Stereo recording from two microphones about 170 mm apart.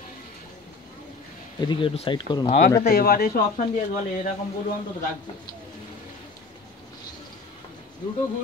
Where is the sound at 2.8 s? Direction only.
65° left (ahead or behind).